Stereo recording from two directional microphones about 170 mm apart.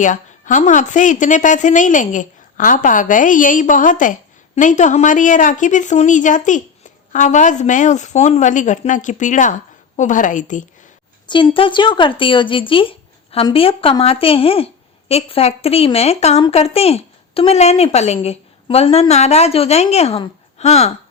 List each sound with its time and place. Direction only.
0.0 s a woman's voice: 50° left (ahead or behind)
11.3 s speech: 30° left (ahead or behind)